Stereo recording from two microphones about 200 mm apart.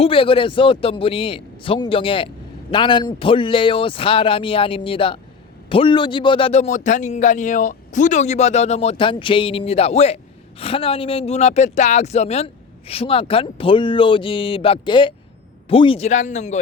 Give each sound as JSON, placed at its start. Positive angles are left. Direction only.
{"t": 0.0, "sound": "a man's voice", "side_deg": 25}